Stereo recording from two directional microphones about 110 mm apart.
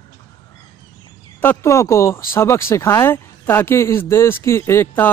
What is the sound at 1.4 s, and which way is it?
Speech, 25° left (ahead or behind).